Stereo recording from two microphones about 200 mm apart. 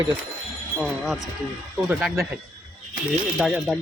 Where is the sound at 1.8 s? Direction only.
Centre (ahead or behind).